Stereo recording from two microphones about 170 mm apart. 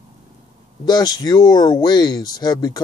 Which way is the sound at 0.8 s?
25° left (ahead or behind).